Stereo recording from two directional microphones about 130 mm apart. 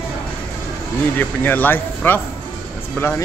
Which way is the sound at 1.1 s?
15° left (ahead or behind).